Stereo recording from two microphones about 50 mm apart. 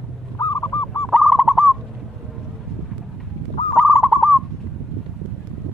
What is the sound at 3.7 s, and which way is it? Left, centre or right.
Bird, centre.